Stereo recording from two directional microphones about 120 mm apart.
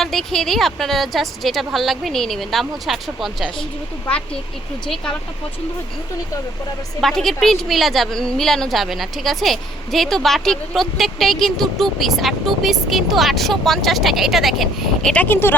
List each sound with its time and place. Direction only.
0.0 s a woman's voice: centre (ahead or behind)
7.0 s a woman's voice: 5° left (ahead or behind)
15.1 s speech: 15° left (ahead or behind)